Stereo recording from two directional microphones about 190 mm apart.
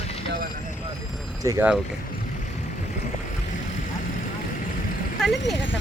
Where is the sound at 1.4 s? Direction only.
10° right (ahead or behind).